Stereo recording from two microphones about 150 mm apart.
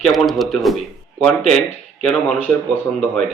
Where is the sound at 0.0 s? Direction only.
Centre (ahead or behind).